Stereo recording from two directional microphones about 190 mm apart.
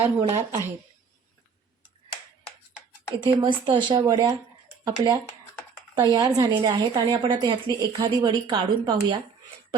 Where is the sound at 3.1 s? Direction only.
25° right (ahead or behind).